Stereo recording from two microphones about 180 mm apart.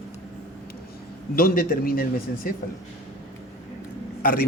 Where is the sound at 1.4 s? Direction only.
55° left (ahead or behind).